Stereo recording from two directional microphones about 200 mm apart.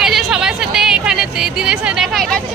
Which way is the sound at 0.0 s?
Centre (ahead or behind).